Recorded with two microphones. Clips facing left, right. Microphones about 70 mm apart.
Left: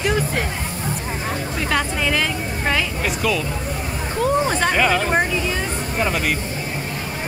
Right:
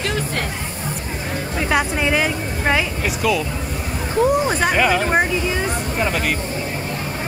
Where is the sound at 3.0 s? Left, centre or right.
Centre.